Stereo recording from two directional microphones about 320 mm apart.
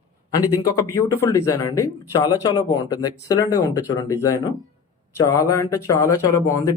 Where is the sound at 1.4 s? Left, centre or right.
Left.